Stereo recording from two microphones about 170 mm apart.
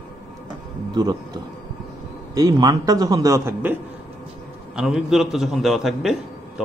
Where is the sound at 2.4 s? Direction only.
20° right (ahead or behind).